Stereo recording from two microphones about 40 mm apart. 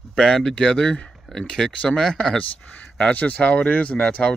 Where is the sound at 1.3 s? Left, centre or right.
Centre.